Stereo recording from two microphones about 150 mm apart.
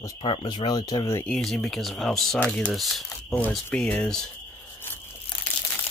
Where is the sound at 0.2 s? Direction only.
35° left (ahead or behind).